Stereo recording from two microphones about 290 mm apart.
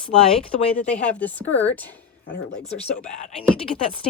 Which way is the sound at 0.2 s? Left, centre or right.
Centre.